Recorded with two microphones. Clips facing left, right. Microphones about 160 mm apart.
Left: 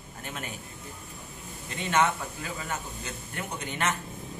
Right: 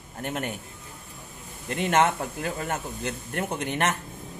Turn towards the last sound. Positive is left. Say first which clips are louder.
# right 5 dB
turn(degrees=-55)  # may be behind; listen again after turning